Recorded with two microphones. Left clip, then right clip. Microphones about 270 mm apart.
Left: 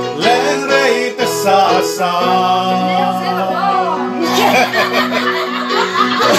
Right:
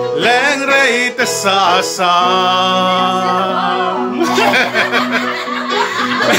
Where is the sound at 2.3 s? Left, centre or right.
Right.